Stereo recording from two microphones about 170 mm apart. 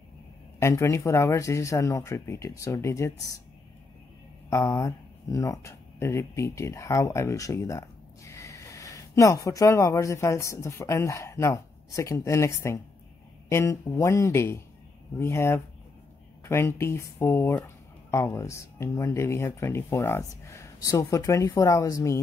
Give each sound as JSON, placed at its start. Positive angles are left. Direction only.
{"t": 0.6, "sound": "speech", "side_deg": 15}
{"t": 4.5, "sound": "speech", "side_deg": 15}